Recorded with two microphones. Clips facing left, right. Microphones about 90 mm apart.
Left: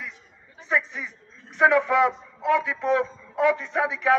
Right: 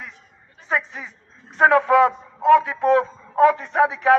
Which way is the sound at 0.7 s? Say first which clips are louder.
Right 1 dB; 40° right (ahead or behind).